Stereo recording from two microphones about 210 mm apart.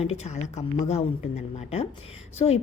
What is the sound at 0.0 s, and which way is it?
A woman's voice, 30° left (ahead or behind).